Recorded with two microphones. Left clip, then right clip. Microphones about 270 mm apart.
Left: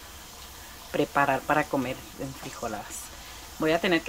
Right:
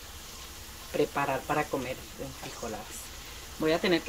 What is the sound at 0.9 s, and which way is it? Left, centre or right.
Speech, centre.